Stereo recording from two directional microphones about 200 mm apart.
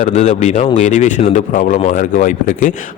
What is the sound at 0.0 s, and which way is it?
A man's voice, 35° left (ahead or behind).